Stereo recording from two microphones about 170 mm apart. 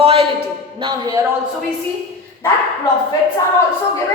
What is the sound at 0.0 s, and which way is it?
A man's voice, 30° right (ahead or behind).